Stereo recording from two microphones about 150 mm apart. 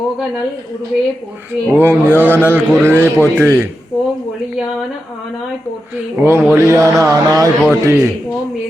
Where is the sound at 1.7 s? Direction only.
15° right (ahead or behind).